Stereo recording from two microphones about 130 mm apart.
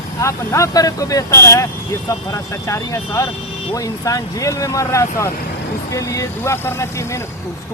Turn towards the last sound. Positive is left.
turn(degrees=25)  # may be behind; listen again after turning